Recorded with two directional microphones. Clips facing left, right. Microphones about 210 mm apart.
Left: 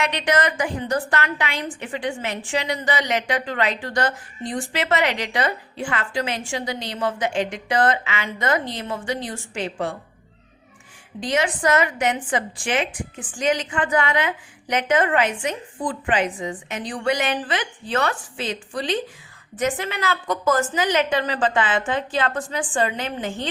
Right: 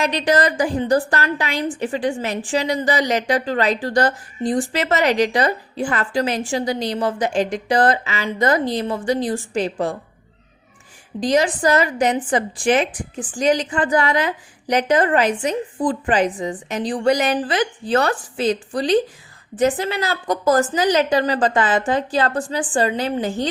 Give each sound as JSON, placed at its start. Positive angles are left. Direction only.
{"t": 0.0, "sound": "a woman's voice", "side_deg": -35}
{"t": 11.2, "sound": "a woman's voice", "side_deg": -35}